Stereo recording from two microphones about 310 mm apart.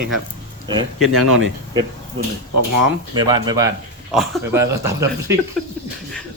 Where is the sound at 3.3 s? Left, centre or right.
Centre.